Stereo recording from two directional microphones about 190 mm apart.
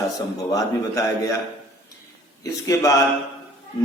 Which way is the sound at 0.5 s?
15° left (ahead or behind).